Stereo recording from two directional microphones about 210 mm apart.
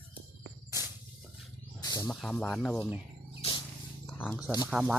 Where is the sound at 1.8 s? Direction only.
15° left (ahead or behind).